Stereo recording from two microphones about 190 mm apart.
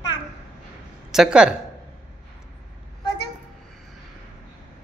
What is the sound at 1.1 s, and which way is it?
Speech, 5° right (ahead or behind).